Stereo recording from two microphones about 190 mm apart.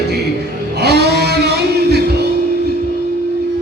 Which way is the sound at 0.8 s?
60° right (ahead or behind).